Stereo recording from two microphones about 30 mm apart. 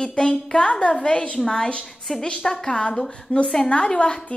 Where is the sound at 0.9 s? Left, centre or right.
Left.